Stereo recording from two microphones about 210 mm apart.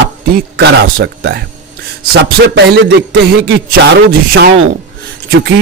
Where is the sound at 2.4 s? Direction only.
55° right (ahead or behind).